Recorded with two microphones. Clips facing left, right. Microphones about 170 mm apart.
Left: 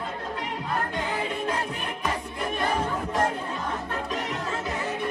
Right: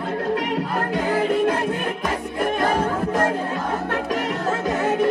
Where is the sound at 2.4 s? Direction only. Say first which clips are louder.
Right 7 dB; 75° right (ahead or behind).